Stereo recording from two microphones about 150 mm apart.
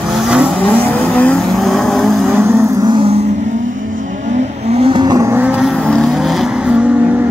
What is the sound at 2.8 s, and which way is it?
Music, 35° right (ahead or behind).